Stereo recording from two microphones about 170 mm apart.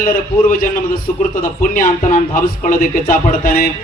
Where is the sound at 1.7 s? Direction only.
50° left (ahead or behind).